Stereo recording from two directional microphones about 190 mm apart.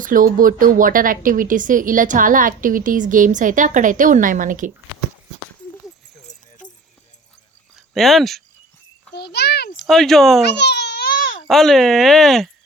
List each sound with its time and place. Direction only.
0.0 s a woman's voice: 45° right (ahead or behind)
6.3 s keys jangling: 35° left (ahead or behind)
7.9 s speech: centre (ahead or behind)
9.1 s a child's voice: 60° left (ahead or behind)
9.7 s speech: centre (ahead or behind)
10.6 s baby cry: 60° left (ahead or behind); by 11.4 s 45° left (ahead or behind)
11.4 s speech: centre (ahead or behind)